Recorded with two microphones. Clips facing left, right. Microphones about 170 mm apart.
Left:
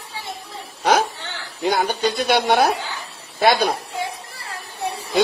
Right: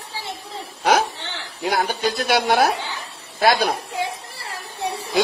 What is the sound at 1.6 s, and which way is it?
Speech, centre (ahead or behind).